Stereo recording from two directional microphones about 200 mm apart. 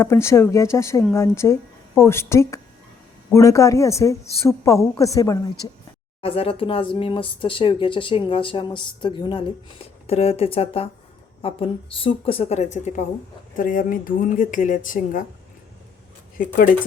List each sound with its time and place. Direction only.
0.0 s speech: 15° left (ahead or behind)
6.2 s speech: 30° left (ahead or behind)
16.4 s speech: 40° left (ahead or behind)